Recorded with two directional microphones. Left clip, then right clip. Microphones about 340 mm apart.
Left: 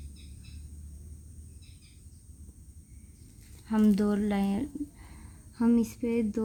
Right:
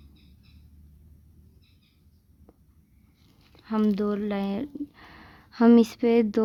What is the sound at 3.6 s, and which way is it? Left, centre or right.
Speech, centre.